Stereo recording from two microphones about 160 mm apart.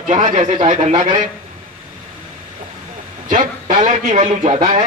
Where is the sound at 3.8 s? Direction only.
50° right (ahead or behind).